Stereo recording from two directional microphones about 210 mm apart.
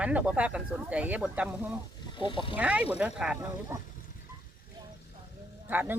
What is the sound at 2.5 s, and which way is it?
Speech, 5° right (ahead or behind).